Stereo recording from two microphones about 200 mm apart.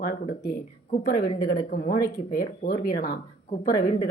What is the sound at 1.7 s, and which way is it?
Speech, 45° left (ahead or behind).